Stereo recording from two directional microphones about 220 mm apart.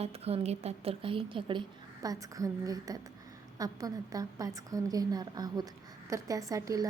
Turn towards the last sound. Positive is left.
turn(degrees=-15)  # may be behind; listen again after turning